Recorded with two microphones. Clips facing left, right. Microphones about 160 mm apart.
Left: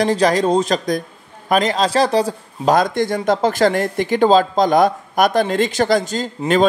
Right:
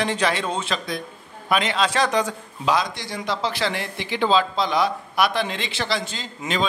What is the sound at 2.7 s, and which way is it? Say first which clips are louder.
Speech: left 8 dB; 50° left (ahead or behind).